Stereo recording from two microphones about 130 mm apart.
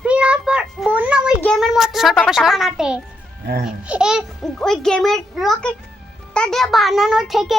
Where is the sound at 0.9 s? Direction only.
10° right (ahead or behind).